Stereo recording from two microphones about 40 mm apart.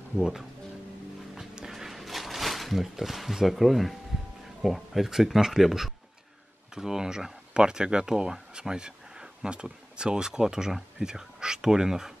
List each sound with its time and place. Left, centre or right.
0.2 s speech: centre
1.5 s a sound: centre
4.6 s speech: centre